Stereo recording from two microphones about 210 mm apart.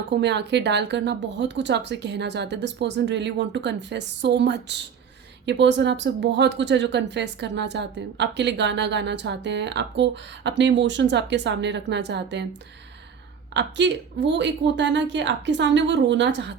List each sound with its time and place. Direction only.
0.1 s speech: 55° right (ahead or behind)
13.5 s speech: 55° right (ahead or behind)